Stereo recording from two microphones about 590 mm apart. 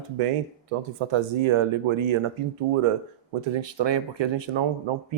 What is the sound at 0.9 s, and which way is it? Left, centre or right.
Speech, right.